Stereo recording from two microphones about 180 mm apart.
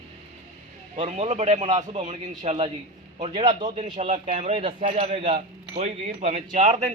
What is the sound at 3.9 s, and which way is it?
Speech, 30° right (ahead or behind).